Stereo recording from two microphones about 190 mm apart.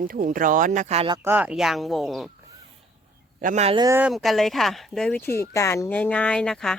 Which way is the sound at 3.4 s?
40° right (ahead or behind).